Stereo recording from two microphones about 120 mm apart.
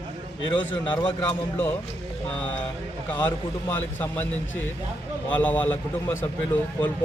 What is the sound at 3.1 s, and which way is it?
Speech, 15° left (ahead or behind).